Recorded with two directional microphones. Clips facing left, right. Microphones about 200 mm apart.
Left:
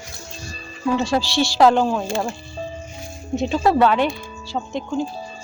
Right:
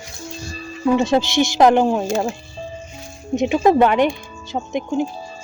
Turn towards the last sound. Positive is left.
turn(degrees=-20)  # may be behind; listen again after turning